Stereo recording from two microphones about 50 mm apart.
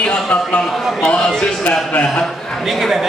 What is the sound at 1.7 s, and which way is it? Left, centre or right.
Speech, left.